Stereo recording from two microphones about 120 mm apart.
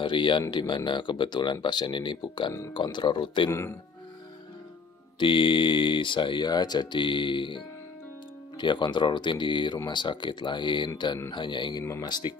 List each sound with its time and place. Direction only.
0.0 s speech: 40° left (ahead or behind)
5.2 s speech: 45° left (ahead or behind)